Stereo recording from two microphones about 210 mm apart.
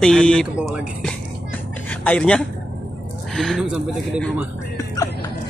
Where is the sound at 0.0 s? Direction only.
5° left (ahead or behind).